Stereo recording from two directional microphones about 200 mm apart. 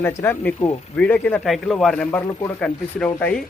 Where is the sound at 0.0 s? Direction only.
10° left (ahead or behind).